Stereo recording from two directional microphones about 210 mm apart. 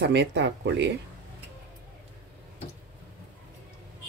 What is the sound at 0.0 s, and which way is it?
Speech, 55° right (ahead or behind).